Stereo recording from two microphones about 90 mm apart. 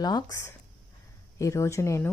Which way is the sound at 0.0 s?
50° left (ahead or behind).